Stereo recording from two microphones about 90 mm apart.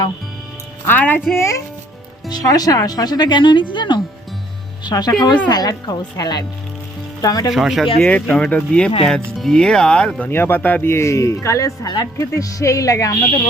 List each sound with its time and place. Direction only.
0.9 s speech: 20° left (ahead or behind)
1.4 s speech: 35° left (ahead or behind)
2.3 s speech: 45° left (ahead or behind)
4.8 s speech: 50° left (ahead or behind)
7.5 s speech: centre (ahead or behind)
8.0 s speech: 10° left (ahead or behind)
10.2 s speech: 25° left (ahead or behind)